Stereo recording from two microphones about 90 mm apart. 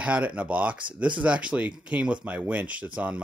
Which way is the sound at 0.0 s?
15° right (ahead or behind).